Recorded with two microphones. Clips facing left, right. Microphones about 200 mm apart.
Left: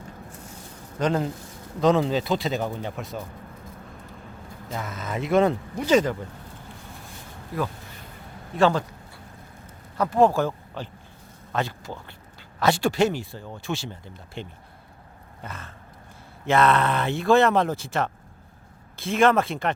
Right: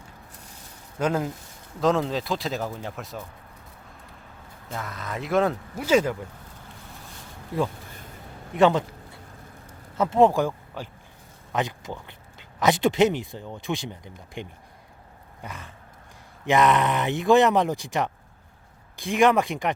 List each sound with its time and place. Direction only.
0.9 s speech: 5° right (ahead or behind)
4.7 s speech: centre (ahead or behind)
8.5 s speech: 20° right (ahead or behind)
10.0 s speech: 20° right (ahead or behind)